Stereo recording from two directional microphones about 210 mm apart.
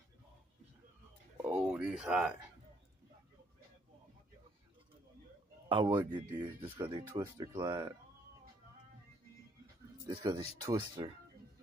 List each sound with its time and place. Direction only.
1.5 s speech: 5° right (ahead or behind)
5.7 s speech: 20° right (ahead or behind)
10.0 s speech: 20° right (ahead or behind)